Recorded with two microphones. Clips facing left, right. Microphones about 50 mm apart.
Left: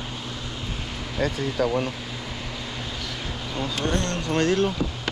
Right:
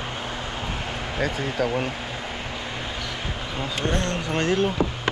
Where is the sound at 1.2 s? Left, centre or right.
Centre.